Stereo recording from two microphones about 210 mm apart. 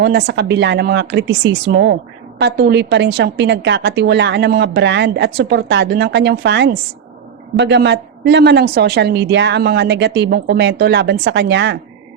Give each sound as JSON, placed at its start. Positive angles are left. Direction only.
{"t": 0.0, "sound": "a woman's voice", "side_deg": -50}